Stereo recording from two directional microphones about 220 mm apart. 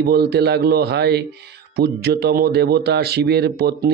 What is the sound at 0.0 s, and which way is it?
Speech, 45° right (ahead or behind).